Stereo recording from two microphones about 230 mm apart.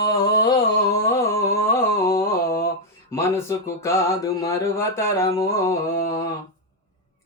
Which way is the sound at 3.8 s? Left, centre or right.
Centre.